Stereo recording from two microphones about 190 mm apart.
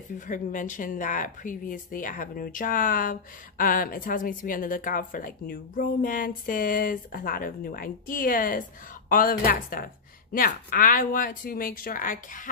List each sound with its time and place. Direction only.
0.3 s a woman's voice: 45° left (ahead or behind)